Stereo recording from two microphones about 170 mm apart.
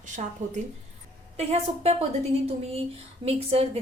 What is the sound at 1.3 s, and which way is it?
Speech, 40° right (ahead or behind).